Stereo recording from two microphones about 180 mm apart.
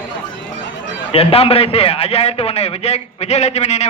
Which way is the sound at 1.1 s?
30° left (ahead or behind).